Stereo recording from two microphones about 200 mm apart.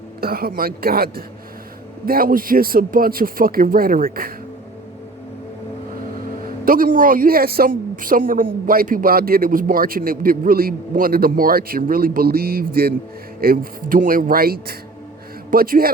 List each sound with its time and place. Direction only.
0.2 s a man's voice: 50° right (ahead or behind)
6.4 s a man's voice: 45° right (ahead or behind)